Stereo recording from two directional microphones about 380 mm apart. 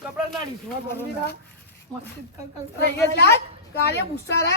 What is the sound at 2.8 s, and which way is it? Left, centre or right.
Whip, left.